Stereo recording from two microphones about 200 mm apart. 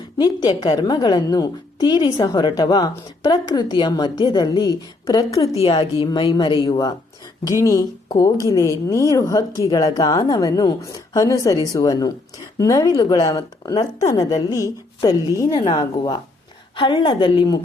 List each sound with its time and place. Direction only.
0.2 s a woman's voice: 20° left (ahead or behind)